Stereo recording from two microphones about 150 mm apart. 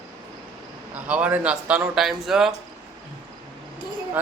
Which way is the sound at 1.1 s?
10° right (ahead or behind).